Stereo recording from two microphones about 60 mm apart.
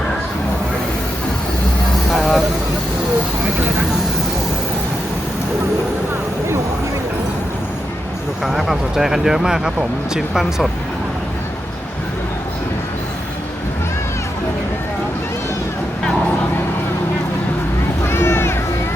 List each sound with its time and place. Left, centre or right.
2.0 s vehicle: centre
8.4 s speech: centre
18.1 s a sound: left